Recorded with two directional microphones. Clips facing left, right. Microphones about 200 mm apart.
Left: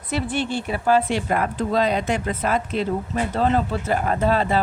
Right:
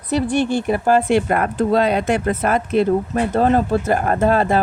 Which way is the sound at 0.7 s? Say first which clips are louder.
Right 3 dB; 50° right (ahead or behind).